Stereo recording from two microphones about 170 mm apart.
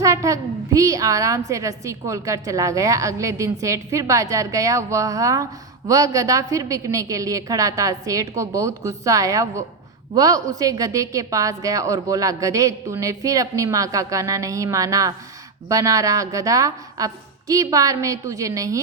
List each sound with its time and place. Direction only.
0.0 s a woman's voice: 20° right (ahead or behind)